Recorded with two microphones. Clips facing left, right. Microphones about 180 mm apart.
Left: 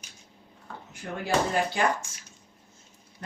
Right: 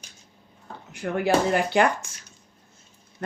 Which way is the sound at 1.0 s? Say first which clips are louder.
Right 6 dB; 75° right (ahead or behind).